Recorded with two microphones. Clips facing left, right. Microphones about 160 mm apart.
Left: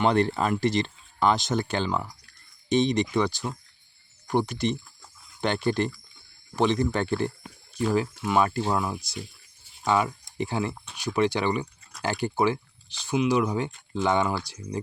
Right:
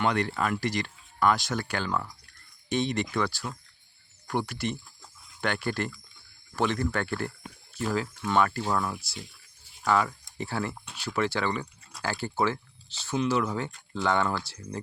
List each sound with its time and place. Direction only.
0.0 s speech: 30° left (ahead or behind)